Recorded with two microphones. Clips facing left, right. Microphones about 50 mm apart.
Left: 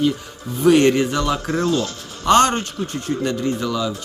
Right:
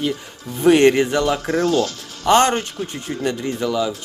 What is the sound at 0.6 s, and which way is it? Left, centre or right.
Speech, right.